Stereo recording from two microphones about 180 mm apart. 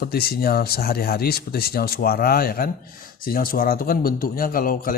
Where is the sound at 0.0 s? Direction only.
60° left (ahead or behind).